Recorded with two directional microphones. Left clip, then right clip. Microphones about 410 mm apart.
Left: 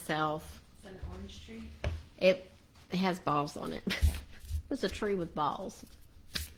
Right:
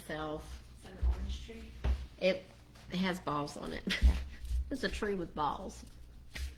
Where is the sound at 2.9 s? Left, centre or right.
Centre.